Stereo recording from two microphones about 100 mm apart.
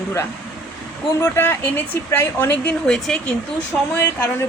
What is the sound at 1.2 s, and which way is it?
Speech, 20° left (ahead or behind).